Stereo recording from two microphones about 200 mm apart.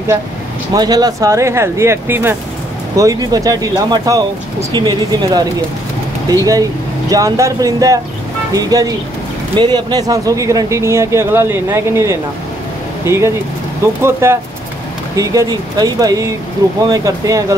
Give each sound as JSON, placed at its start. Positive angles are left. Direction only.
{"t": 0.7, "sound": "speech", "side_deg": -20}
{"t": 7.1, "sound": "speech", "side_deg": -15}